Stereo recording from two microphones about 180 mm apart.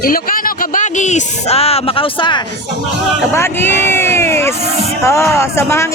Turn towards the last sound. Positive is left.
turn(degrees=15)  # may be behind; listen again after turning